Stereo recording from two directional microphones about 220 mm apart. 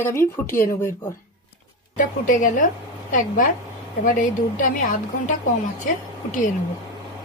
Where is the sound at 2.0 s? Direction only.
35° left (ahead or behind).